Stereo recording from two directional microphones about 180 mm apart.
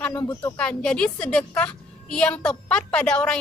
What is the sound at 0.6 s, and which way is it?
A woman's voice, 5° left (ahead or behind).